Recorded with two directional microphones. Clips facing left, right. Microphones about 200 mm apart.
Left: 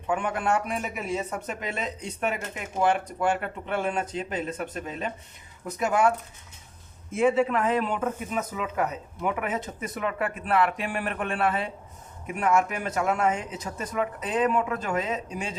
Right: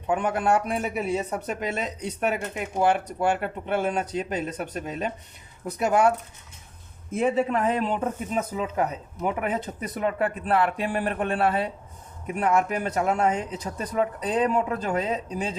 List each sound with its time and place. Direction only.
0.1 s speech: 40° right (ahead or behind)
7.1 s speech: 40° right (ahead or behind)